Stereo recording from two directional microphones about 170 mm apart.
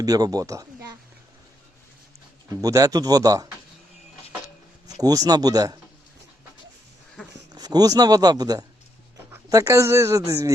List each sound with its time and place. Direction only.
0.0 s speech: 20° right (ahead or behind)
2.5 s speech: 20° right (ahead or behind)
4.9 s speech: 20° right (ahead or behind)
7.5 s speech: 25° right (ahead or behind)